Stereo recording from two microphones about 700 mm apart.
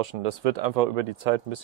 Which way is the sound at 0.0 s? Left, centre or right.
Right.